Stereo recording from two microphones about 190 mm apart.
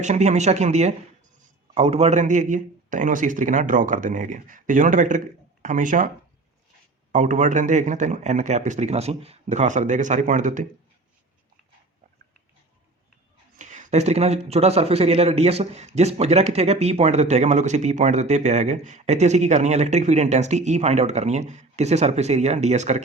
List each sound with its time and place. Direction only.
0.0 s a man's voice: 40° right (ahead or behind)
7.1 s speech: 40° right (ahead or behind)
13.6 s speech: 40° right (ahead or behind)